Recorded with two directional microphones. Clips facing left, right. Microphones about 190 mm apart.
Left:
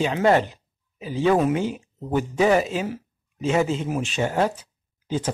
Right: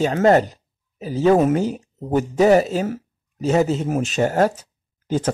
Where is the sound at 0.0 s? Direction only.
40° right (ahead or behind).